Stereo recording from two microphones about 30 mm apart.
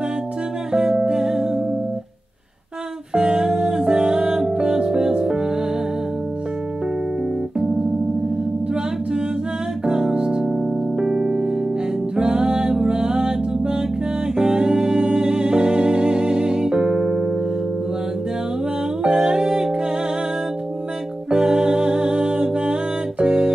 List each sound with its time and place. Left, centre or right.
0.7 s music: right
3.2 s music: right
9.8 s keyboard: right
10.2 s music: right
19.0 s music: right
21.3 s music: right